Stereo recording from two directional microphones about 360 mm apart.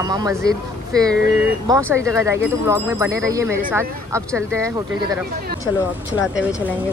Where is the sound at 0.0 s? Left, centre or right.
Centre.